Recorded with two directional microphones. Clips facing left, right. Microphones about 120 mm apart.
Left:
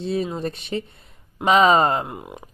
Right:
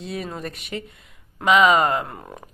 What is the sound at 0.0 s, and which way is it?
Speech, 30° left (ahead or behind).